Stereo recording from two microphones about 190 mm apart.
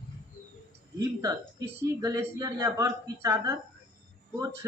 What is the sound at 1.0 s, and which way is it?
A woman's voice, 15° right (ahead or behind).